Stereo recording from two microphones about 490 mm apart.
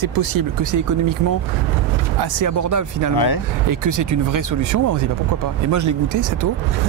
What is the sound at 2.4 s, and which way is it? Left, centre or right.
Speech, right.